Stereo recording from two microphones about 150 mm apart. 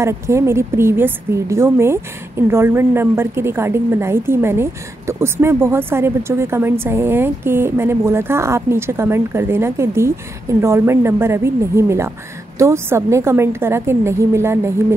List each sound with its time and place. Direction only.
0.0 s a woman's voice: 20° right (ahead or behind)